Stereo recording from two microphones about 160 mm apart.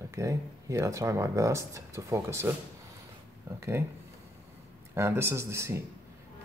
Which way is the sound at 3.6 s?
15° right (ahead or behind).